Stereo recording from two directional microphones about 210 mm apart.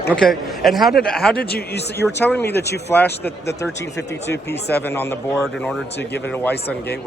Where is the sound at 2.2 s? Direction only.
10° left (ahead or behind).